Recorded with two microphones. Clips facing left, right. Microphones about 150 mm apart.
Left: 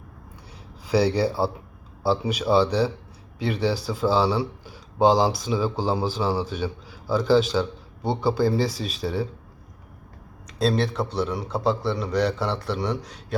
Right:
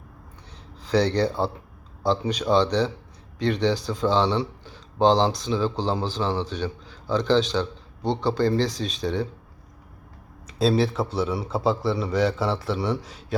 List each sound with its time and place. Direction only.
0.9 s a man's voice: 10° left (ahead or behind)
10.4 s a man's voice: centre (ahead or behind)